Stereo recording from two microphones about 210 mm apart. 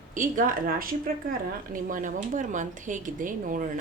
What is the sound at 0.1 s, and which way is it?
A woman's voice, 40° right (ahead or behind).